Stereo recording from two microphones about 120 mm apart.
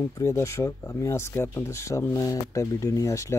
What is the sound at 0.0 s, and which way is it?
Speech, 25° left (ahead or behind).